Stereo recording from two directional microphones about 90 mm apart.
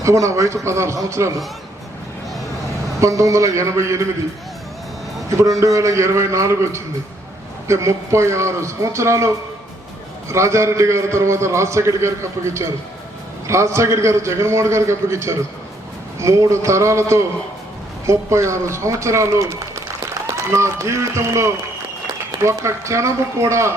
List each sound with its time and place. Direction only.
0.0 s a man's voice: 35° right (ahead or behind)
3.0 s a man's voice: 35° right (ahead or behind)
5.4 s a man's voice: 35° right (ahead or behind)